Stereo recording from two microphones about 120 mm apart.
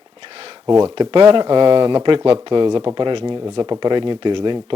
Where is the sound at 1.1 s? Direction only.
45° right (ahead or behind).